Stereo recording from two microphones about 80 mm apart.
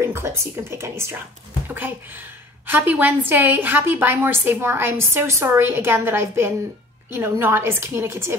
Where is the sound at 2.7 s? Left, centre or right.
Right.